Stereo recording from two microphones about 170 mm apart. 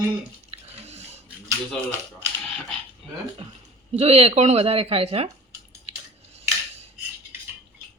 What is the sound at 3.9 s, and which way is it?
A woman's voice, 35° right (ahead or behind).